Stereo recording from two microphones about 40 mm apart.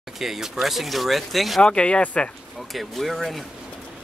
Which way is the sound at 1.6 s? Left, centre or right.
Left.